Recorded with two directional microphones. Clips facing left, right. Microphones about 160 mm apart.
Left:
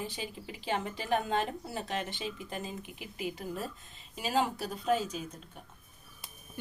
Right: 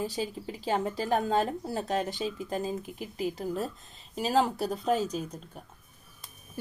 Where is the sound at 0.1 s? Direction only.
40° right (ahead or behind).